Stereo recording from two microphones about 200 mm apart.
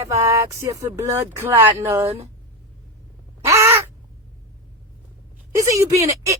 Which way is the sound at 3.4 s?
15° right (ahead or behind).